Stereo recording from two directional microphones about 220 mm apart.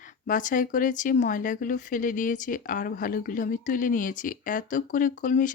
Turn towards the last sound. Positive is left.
turn(degrees=35)  # may be behind; listen again after turning